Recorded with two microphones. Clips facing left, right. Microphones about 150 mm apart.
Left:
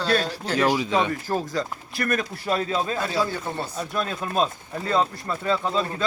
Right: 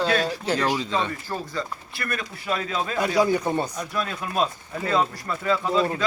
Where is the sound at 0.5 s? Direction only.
15° left (ahead or behind).